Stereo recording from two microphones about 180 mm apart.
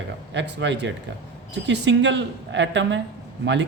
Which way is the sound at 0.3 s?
80° right.